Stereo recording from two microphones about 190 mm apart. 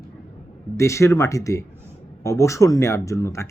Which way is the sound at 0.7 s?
15° left (ahead or behind).